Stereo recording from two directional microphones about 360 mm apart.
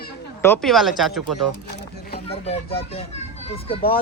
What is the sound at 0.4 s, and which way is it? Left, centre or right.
Speech, centre.